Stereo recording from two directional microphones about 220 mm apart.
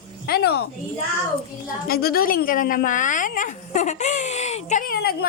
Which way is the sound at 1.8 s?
45° left (ahead or behind).